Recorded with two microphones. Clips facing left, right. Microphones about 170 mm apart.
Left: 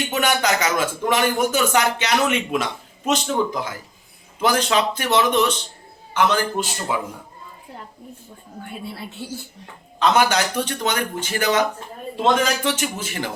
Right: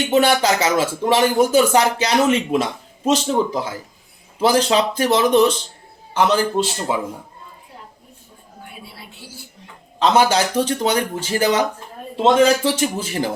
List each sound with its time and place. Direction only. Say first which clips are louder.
0.0 s a man's voice: right 5 dB; 30° right (ahead or behind)
10.0 s speech: right 2 dB; 30° right (ahead or behind)